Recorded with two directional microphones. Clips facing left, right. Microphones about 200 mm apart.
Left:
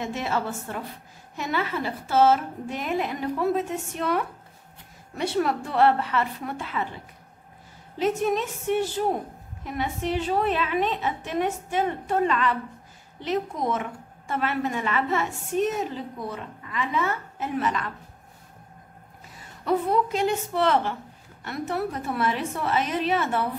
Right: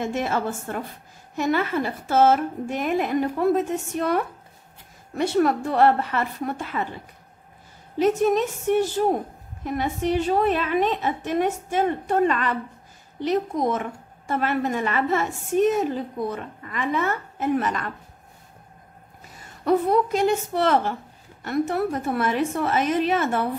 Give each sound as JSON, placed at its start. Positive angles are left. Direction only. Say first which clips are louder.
{"t": 0.0, "sound": "a woman's voice", "louder": "right 3 dB", "side_deg": -50}
{"t": 8.0, "sound": "a woman's voice", "louder": "right 4 dB", "side_deg": -45}
{"t": 19.6, "sound": "a woman's voice", "louder": "right 4 dB", "side_deg": -45}